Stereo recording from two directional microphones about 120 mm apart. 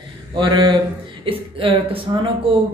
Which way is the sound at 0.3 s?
40° right (ahead or behind).